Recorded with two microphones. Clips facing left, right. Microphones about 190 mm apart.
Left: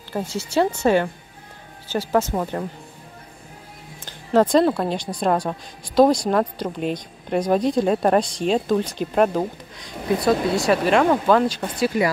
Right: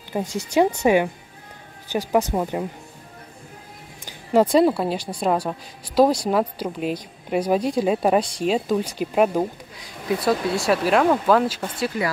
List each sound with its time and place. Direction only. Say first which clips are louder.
0.3 s speech: right 2 dB; 15° right (ahead or behind)
4.0 s speech: even; 10° right (ahead or behind)